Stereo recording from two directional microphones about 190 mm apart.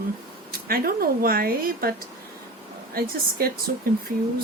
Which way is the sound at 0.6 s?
50° right (ahead or behind).